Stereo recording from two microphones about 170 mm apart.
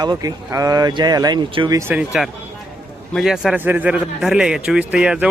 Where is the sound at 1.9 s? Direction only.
5° right (ahead or behind).